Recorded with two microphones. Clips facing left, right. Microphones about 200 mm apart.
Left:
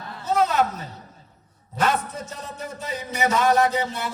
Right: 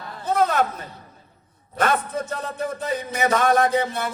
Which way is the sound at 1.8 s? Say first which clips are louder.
Right 2 dB; 55° right (ahead or behind).